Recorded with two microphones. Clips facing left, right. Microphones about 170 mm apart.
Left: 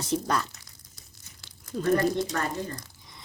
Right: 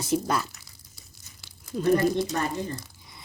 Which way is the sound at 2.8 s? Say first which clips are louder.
Right 1 dB; 5° right (ahead or behind).